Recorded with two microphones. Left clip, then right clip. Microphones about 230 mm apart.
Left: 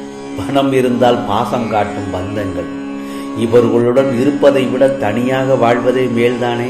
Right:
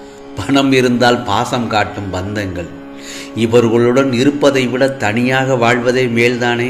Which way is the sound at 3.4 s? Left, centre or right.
Right.